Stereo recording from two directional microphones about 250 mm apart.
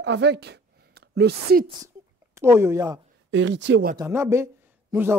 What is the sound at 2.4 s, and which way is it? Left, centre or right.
Speech, centre.